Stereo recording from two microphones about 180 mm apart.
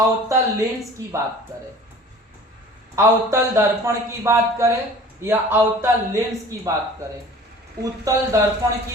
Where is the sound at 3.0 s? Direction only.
15° right (ahead or behind).